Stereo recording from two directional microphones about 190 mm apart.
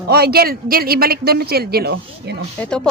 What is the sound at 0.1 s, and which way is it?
Speech, 55° right (ahead or behind).